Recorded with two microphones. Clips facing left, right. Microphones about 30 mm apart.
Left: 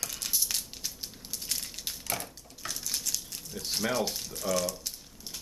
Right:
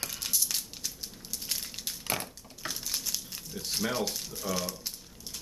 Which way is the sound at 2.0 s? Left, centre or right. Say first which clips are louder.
Right 3 dB; right.